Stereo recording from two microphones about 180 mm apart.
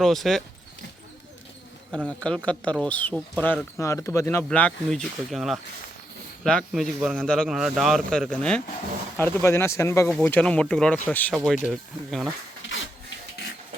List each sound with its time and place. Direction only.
0.0 s speech: centre (ahead or behind)
2.0 s speech: 5° left (ahead or behind)
10.1 s speech: 5° left (ahead or behind)
11.6 s speech: centre (ahead or behind)
12.6 s printer: 90° left